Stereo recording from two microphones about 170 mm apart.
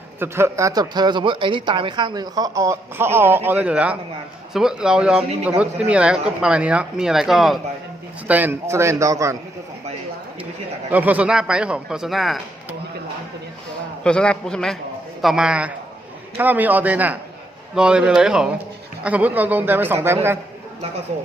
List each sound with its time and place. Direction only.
0.2 s speech: 15° right (ahead or behind)
10.9 s speech: 10° right (ahead or behind)
14.0 s speech: 5° left (ahead or behind); by 20.1 s 10° right (ahead or behind)